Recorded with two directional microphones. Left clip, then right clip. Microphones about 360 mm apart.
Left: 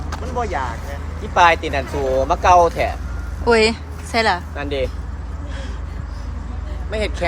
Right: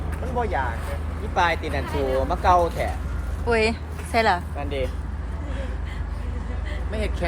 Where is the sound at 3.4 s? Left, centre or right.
Centre.